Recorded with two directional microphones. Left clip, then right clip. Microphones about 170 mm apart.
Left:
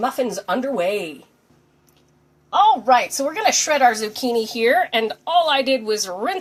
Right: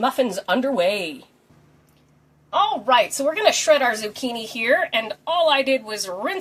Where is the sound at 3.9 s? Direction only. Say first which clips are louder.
Left 4 dB; 35° left (ahead or behind).